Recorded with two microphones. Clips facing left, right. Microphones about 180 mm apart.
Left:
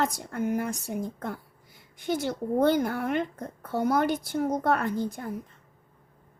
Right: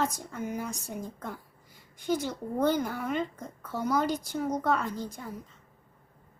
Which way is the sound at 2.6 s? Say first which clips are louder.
Left 2 dB; 60° left (ahead or behind).